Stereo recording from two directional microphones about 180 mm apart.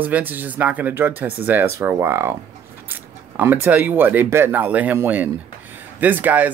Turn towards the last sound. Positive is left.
turn(degrees=-10)  # may be behind; listen again after turning